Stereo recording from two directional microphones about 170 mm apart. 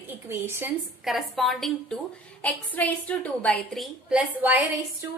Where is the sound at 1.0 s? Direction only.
Centre (ahead or behind).